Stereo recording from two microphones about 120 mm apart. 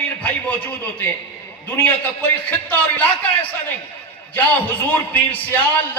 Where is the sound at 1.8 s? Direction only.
15° left (ahead or behind).